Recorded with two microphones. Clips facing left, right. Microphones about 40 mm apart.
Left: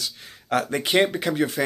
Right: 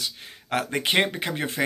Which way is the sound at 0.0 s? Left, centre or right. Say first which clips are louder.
Even; right.